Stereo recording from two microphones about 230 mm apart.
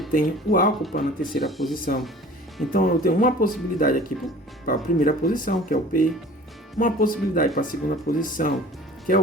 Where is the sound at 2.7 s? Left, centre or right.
Left.